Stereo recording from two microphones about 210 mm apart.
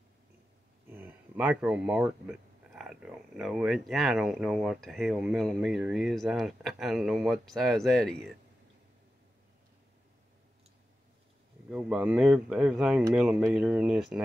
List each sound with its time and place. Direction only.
0.8 s speech: 10° right (ahead or behind)
11.7 s speech: 5° right (ahead or behind)